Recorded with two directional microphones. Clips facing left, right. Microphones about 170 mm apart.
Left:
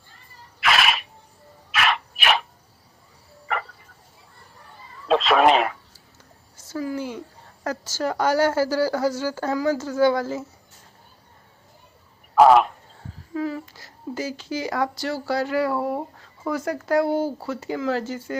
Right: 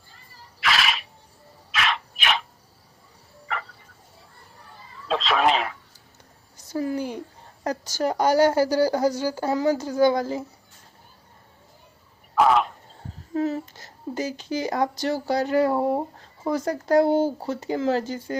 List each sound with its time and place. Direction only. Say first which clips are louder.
0.6 s a sound: left 3 dB; 55° left (ahead or behind)
1.7 s frog: left 3 dB; 55° left (ahead or behind)
5.0 s cat: left 5 dB; 55° left (ahead or behind)
6.7 s speech: right 2 dB; 35° right (ahead or behind)
7.6 s speech: right 1 dB; 15° right (ahead or behind)
9.5 s speech: right 1 dB; 30° right (ahead or behind)
9.7 s speech: even; 15° right (ahead or behind)
13.3 s a sound: right 2 dB; 25° right (ahead or behind)
14.2 s speech: right 1 dB; 20° right (ahead or behind); by 17.0 s 40° right (ahead or behind)
17.0 s a child's voice: right 2 dB; 25° right (ahead or behind)